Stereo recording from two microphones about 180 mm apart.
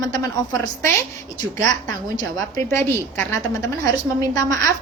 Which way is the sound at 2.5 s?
15° left (ahead or behind).